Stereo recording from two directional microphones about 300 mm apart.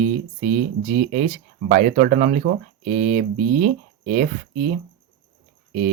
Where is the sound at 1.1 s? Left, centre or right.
Right.